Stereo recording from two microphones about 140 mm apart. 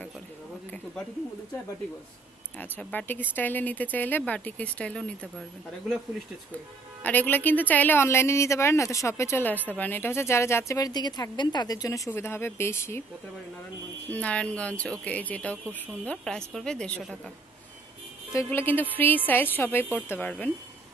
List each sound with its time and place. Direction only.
2.6 s speech: 10° left (ahead or behind)
7.0 s a woman's voice: 10° left (ahead or behind)
14.1 s speech: 10° left (ahead or behind)
18.3 s speech: 20° left (ahead or behind)